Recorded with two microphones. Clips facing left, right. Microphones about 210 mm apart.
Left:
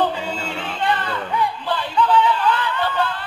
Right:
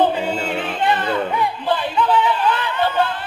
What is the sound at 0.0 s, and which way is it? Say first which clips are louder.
Music: right 4 dB; 20° right (ahead or behind).